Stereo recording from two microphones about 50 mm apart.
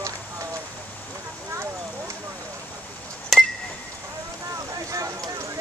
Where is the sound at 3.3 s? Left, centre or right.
Centre.